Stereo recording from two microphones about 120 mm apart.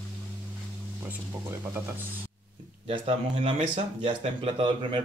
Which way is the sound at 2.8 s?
55° right (ahead or behind).